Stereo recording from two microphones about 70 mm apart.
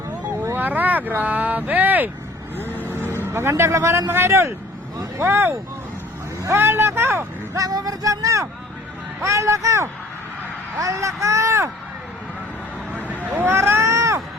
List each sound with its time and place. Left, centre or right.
0.5 s speech: right
2.6 s vehicle: left
3.2 s speech: right
7.5 s speech: right
13.2 s vehicle: right
13.9 s a sound: right